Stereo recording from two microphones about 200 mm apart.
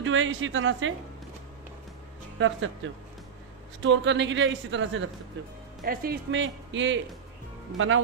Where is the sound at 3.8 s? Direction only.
65° right (ahead or behind).